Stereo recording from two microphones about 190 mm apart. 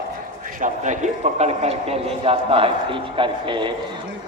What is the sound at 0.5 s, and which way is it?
A man's voice, 40° right (ahead or behind).